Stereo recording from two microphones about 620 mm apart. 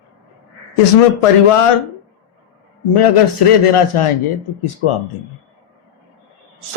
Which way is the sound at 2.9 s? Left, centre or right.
Left.